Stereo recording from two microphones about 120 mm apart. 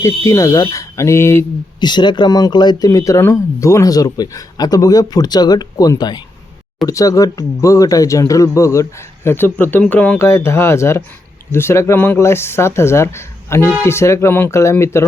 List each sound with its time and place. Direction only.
0.0 s speech: 25° left (ahead or behind)
1.8 s speech: 40° left (ahead or behind); by 15.0 s 20° left (ahead or behind)